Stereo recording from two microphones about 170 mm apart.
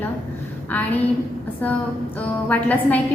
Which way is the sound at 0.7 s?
10° left (ahead or behind).